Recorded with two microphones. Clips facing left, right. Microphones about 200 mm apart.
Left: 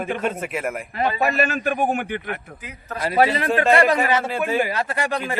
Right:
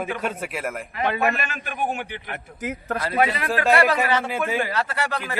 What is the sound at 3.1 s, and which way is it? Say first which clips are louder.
Speech: left 4 dB; 30° left (ahead or behind).